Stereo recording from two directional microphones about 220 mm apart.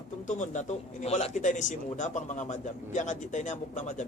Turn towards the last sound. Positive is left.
turn(degrees=35)  # may be behind; listen again after turning